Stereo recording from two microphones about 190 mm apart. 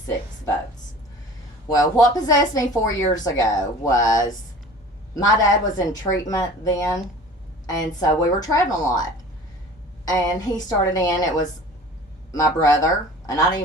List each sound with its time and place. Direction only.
1.6 s speech: 20° left (ahead or behind)
10.1 s speech: 20° left (ahead or behind)
12.3 s speech: 20° left (ahead or behind)